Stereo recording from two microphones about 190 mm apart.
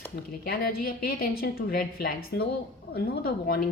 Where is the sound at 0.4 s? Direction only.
55° left (ahead or behind).